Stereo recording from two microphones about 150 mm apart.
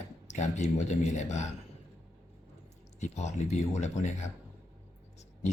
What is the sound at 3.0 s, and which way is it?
A man's voice, 50° left (ahead or behind).